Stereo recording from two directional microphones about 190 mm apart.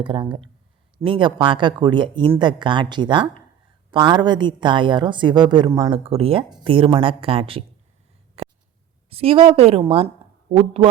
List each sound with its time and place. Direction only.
0.0 s a woman's voice: 25° right (ahead or behind)
5.9 s a woman's voice: 30° right (ahead or behind)
8.4 s a sound: 30° right (ahead or behind)
9.0 s a woman's voice: 30° right (ahead or behind)